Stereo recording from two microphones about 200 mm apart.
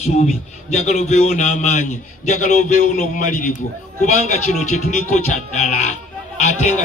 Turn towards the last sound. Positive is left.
turn(degrees=35)  # may be behind; listen again after turning